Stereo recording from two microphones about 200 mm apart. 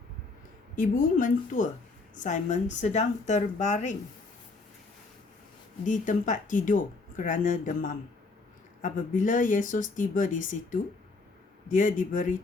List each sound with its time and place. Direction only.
0.8 s a woman's voice: 45° left (ahead or behind)
5.8 s speech: 40° left (ahead or behind)